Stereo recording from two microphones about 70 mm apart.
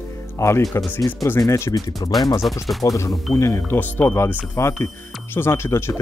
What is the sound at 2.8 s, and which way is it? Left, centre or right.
Speech, left.